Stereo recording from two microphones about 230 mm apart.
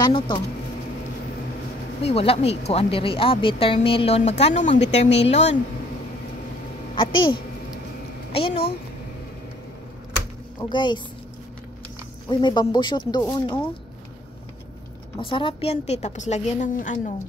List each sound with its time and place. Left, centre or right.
0.0 s speech: centre
2.0 s speech: left
8.3 s a woman's voice: left
10.6 s speech: centre
12.3 s speech: centre
15.1 s speech: left